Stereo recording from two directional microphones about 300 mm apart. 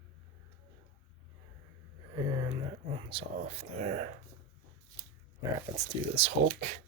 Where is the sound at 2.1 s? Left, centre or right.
Centre.